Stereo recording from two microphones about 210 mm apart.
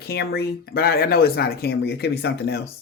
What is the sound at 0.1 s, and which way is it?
Speech, 50° left (ahead or behind).